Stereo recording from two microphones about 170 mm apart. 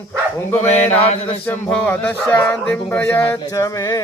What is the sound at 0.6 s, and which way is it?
Mantra, 45° left (ahead or behind).